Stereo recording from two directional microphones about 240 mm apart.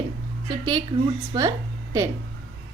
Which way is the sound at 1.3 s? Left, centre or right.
Centre.